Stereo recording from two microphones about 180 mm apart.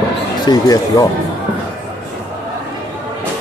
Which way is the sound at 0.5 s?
20° left (ahead or behind).